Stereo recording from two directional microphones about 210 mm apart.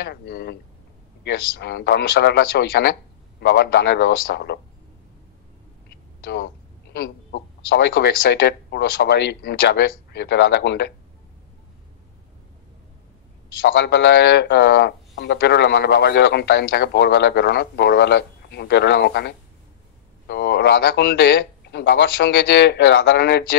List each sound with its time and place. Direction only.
0.0 s speech: 50° left (ahead or behind)
5.9 s speech: 50° left (ahead or behind)
13.7 s speech: 55° left (ahead or behind)